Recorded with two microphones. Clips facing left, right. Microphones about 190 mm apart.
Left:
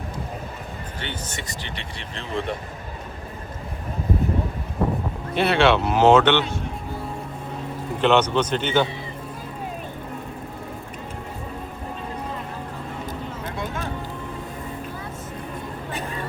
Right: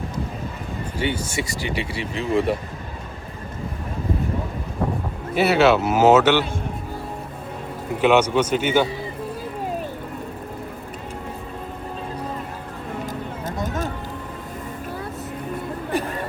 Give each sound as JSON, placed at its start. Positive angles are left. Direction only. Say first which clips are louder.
{"t": 0.9, "sound": "speech", "louder": "right 10 dB", "side_deg": -10}
{"t": 5.3, "sound": "speech", "louder": "right 2 dB", "side_deg": -5}
{"t": 8.0, "sound": "speech", "louder": "right 2 dB", "side_deg": -10}
{"t": 13.1, "sound": "vehicle", "louder": "right 2 dB", "side_deg": -45}